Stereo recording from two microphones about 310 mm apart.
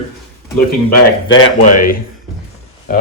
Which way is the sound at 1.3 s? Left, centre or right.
Left.